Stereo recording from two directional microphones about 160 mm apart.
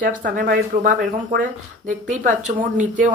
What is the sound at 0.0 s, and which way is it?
Speech, 55° right (ahead or behind).